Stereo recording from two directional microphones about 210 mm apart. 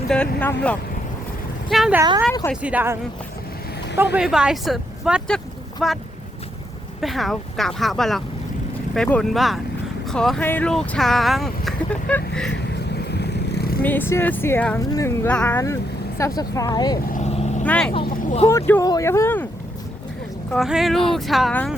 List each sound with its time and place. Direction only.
0.1 s speech: 5° left (ahead or behind)
2.0 s speech: 15° right (ahead or behind)
2.3 s speech: 10° left (ahead or behind)
2.6 s speech: 5° right (ahead or behind)
7.0 s speech: centre (ahead or behind)
12.9 s vehicle: 50° left (ahead or behind)
13.8 s speech: 10° left (ahead or behind)
17.1 s vehicle: 35° left (ahead or behind)
17.7 s speech: 5° left (ahead or behind)
18.2 s vehicle: 35° left (ahead or behind)
18.4 s speech: 10° left (ahead or behind)
20.5 s speech: centre (ahead or behind)